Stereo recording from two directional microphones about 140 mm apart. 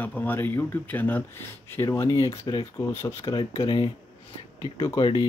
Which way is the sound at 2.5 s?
30° left (ahead or behind).